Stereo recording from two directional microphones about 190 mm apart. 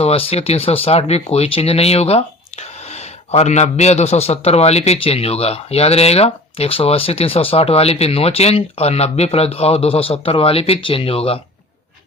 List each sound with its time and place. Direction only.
0.0 s speech: 30° left (ahead or behind)